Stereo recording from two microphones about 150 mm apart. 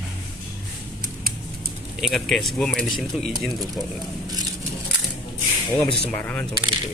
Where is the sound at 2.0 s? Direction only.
Centre (ahead or behind).